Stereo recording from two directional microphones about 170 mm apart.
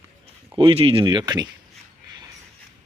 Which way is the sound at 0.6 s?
35° right (ahead or behind).